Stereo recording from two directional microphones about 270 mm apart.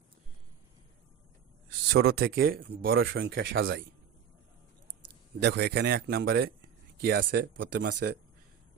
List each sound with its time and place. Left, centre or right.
1.9 s speech: right
5.4 s speech: right